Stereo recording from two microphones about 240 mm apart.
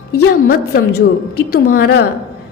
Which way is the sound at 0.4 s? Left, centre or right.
Left.